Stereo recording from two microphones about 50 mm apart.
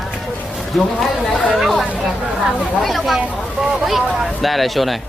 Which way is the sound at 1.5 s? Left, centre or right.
Centre.